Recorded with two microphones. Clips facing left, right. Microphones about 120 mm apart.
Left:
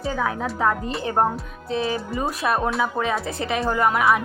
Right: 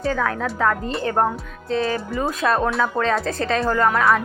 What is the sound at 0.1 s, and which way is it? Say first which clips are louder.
Speech: even; 15° left (ahead or behind).